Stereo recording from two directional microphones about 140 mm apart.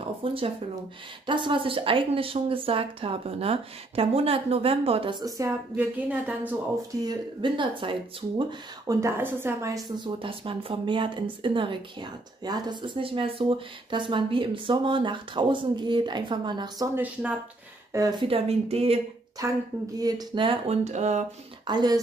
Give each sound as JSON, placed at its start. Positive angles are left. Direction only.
{"t": 0.2, "sound": "speech", "side_deg": -40}
{"t": 5.8, "sound": "a woman's voice", "side_deg": -10}
{"t": 7.0, "sound": "speech", "side_deg": -30}
{"t": 9.0, "sound": "speech", "side_deg": -15}
{"t": 16.9, "sound": "a woman's voice", "side_deg": -10}
{"t": 17.9, "sound": "a woman's voice", "side_deg": -25}
{"t": 18.2, "sound": "speech", "side_deg": -45}
{"t": 19.4, "sound": "a woman's voice", "side_deg": -20}
{"t": 21.6, "sound": "a woman's voice", "side_deg": -30}